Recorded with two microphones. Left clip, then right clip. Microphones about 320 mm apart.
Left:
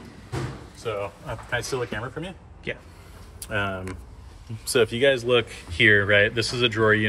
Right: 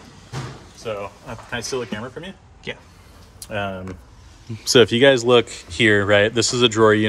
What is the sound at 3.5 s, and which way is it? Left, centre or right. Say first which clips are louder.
Speech: right 1 dB; right.